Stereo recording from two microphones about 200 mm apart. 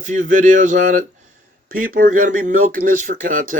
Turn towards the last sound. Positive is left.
turn(degrees=-40)  # may be behind; listen again after turning